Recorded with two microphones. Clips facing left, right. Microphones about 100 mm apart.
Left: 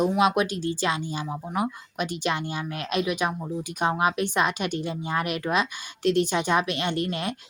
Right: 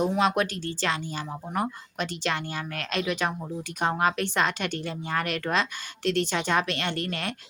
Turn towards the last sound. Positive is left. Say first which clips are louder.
# left 3 dB
turn(degrees=20)  # may be behind; listen again after turning